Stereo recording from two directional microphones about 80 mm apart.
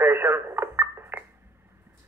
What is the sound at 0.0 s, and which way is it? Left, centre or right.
Radio, right.